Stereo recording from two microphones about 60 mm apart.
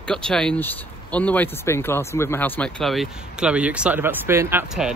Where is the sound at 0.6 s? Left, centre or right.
Left.